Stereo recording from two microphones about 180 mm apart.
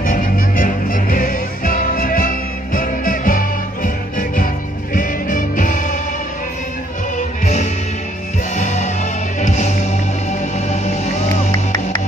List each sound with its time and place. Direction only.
0.0 s music: 50° left (ahead or behind)
8.5 s music: 40° left (ahead or behind)